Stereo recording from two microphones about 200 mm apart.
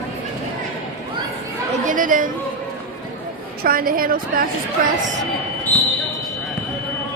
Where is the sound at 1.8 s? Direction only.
40° right (ahead or behind).